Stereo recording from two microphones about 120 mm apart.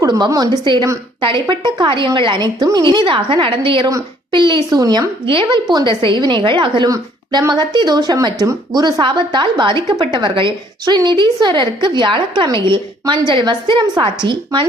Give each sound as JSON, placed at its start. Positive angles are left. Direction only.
{"t": 0.1, "sound": "a woman's voice", "side_deg": -35}
{"t": 3.8, "sound": "a woman's voice", "side_deg": -35}